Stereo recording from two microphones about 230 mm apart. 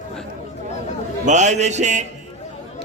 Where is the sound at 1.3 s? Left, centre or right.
Right.